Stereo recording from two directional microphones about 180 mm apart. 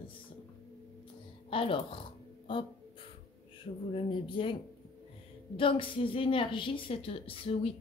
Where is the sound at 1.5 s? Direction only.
30° left (ahead or behind).